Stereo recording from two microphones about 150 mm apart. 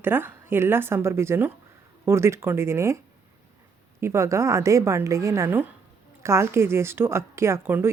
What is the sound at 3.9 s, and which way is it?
A woman's voice, 20° right (ahead or behind).